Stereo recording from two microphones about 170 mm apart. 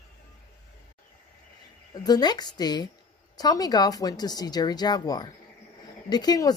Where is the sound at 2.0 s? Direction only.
25° left (ahead or behind).